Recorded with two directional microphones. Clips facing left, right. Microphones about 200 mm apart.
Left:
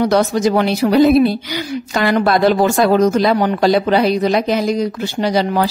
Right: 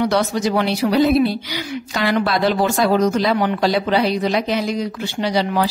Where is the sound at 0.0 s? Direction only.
45° left (ahead or behind).